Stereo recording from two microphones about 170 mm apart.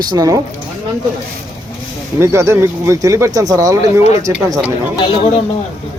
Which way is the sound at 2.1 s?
15° right (ahead or behind).